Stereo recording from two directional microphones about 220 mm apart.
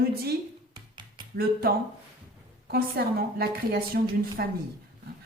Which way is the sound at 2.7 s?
45° right (ahead or behind).